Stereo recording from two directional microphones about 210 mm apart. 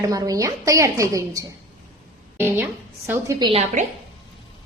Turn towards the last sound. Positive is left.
turn(degrees=-20)  # may be behind; listen again after turning